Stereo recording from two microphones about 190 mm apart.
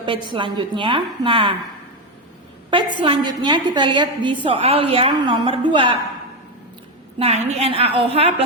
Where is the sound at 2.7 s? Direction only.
25° right (ahead or behind).